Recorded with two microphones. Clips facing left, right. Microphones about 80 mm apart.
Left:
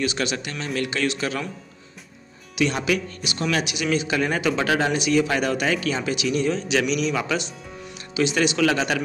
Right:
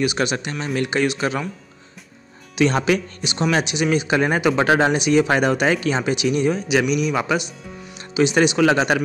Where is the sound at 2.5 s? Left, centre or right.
Right.